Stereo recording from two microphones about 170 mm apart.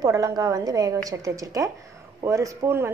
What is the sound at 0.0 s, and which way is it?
A woman's voice, 20° right (ahead or behind).